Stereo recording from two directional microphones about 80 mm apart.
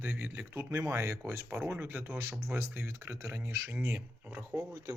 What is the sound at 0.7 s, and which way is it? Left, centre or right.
Speech, right.